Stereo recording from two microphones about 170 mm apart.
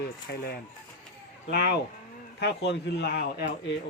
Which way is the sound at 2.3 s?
85° left.